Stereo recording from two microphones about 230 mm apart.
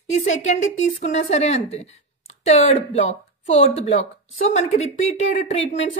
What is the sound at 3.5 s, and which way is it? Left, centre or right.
A woman's voice, left.